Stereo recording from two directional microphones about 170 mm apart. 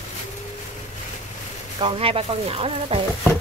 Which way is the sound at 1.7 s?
30° right (ahead or behind).